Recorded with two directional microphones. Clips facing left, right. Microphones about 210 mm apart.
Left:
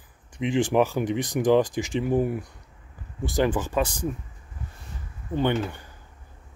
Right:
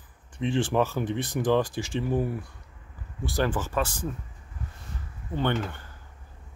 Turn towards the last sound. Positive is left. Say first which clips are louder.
# left 3 dB
turn(degrees=15)  # may be behind; listen again after turning